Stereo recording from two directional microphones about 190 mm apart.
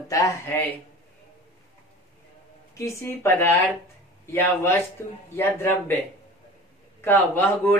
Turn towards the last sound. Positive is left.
turn(degrees=10)  # may be behind; listen again after turning